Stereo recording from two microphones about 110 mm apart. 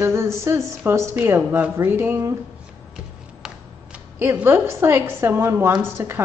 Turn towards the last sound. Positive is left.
turn(degrees=-20)  # may be behind; listen again after turning